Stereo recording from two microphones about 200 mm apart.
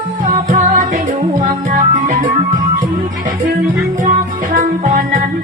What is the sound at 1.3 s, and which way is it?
Music, 40° right (ahead or behind).